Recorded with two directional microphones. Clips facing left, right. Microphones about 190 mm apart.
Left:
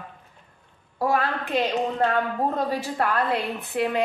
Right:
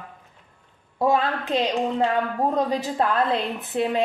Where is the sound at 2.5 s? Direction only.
20° right (ahead or behind).